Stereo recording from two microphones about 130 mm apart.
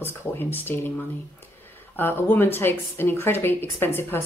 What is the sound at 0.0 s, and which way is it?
Speech, 15° left (ahead or behind).